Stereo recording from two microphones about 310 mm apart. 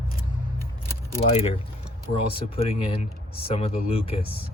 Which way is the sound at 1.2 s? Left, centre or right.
Centre.